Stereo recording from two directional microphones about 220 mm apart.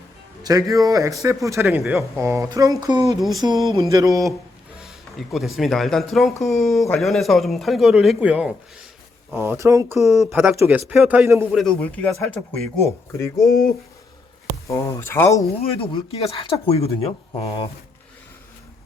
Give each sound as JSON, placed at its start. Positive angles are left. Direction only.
{"t": 0.4, "sound": "speech", "side_deg": -15}
{"t": 1.6, "sound": "a man's voice", "side_deg": -5}
{"t": 4.8, "sound": "a man's voice", "side_deg": 0}
{"t": 10.0, "sound": "speech", "side_deg": 0}
{"t": 11.6, "sound": "a man's voice", "side_deg": 5}
{"t": 14.7, "sound": "speech", "side_deg": 15}
{"t": 15.6, "sound": "speech", "side_deg": 25}